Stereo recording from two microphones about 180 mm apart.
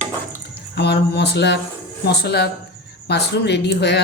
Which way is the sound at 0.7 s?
65° left (ahead or behind).